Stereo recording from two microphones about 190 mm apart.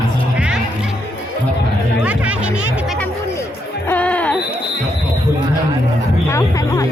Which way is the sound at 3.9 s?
5° left (ahead or behind).